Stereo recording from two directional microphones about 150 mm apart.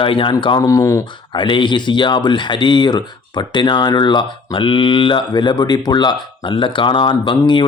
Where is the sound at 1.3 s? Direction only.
30° left (ahead or behind).